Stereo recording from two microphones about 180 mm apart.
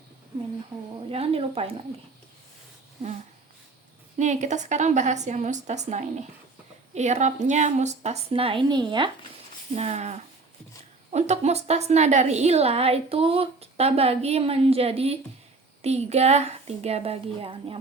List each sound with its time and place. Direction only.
1.1 s a woman's voice: 35° right (ahead or behind)
4.2 s a woman's voice: 40° right (ahead or behind); by 9.0 s 25° right (ahead or behind)
9.7 s a woman's voice: 40° right (ahead or behind)